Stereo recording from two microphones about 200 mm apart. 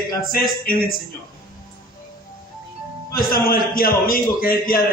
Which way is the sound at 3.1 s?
45° left (ahead or behind).